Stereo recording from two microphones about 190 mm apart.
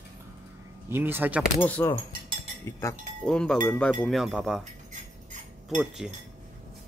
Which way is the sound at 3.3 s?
5° left (ahead or behind).